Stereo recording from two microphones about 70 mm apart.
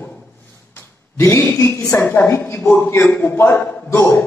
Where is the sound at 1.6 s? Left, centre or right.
Left.